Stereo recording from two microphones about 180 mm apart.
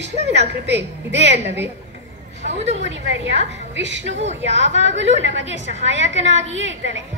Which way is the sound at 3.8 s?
80° right.